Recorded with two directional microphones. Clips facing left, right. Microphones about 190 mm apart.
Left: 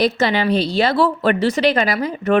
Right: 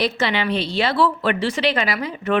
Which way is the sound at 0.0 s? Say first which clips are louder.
Left 4 dB; 40° left (ahead or behind).